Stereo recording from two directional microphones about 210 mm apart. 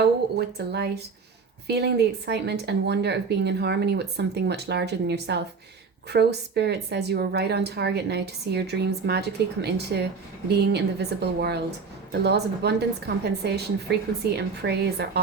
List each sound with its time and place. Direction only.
0.0 s a woman's voice: 50° right (ahead or behind)